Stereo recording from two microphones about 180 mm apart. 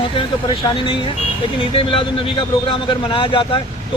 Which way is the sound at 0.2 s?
25° left (ahead or behind).